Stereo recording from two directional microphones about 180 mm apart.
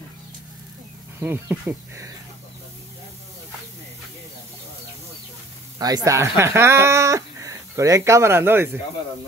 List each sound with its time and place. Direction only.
1.2 s speech: 10° right (ahead or behind)
5.8 s speech: 20° right (ahead or behind)